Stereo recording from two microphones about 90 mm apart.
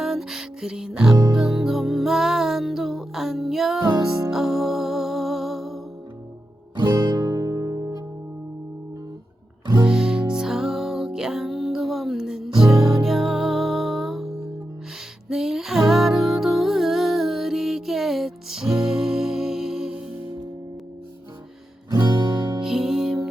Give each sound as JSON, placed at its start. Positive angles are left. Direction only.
{"t": 0.0, "sound": "music", "side_deg": -5}
{"t": 6.7, "sound": "music", "side_deg": -45}
{"t": 9.8, "sound": "music", "side_deg": -5}
{"t": 15.3, "sound": "music", "side_deg": -5}
{"t": 21.8, "sound": "music", "side_deg": -50}
{"t": 22.6, "sound": "music", "side_deg": -5}